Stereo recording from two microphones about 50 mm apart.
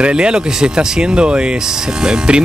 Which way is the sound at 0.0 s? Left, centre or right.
Centre.